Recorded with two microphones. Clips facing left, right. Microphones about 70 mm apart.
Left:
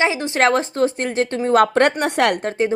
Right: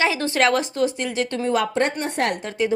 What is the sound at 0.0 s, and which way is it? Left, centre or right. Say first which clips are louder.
Speech: left 2 dB; left.